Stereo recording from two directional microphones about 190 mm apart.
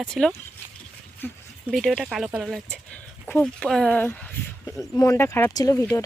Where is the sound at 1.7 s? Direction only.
Centre (ahead or behind).